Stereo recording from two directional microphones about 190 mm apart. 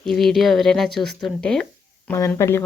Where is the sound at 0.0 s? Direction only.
Centre (ahead or behind).